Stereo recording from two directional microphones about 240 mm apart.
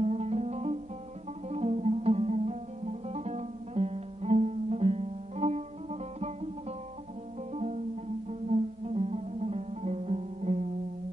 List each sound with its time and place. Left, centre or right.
0.0 s music: right
7.5 s music: right